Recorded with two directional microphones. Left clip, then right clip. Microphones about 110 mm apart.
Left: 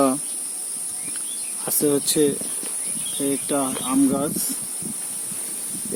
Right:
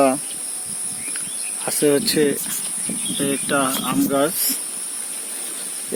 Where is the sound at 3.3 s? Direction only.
15° right (ahead or behind).